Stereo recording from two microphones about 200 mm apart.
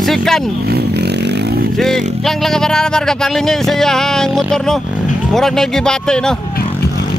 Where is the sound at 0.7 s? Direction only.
55° right (ahead or behind).